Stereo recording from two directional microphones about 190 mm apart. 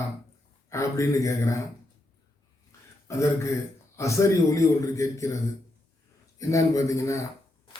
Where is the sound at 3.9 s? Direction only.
15° left (ahead or behind).